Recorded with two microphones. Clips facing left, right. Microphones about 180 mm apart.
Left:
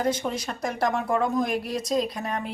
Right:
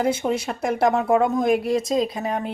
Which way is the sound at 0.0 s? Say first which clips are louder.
Right 4 dB; 5° right (ahead or behind).